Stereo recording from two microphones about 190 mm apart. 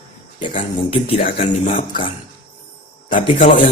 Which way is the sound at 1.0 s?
35° left (ahead or behind).